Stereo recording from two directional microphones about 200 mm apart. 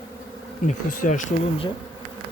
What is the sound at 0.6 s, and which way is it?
Speech, 40° left (ahead or behind).